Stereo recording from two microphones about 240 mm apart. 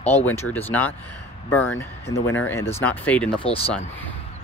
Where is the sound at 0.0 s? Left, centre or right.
Centre.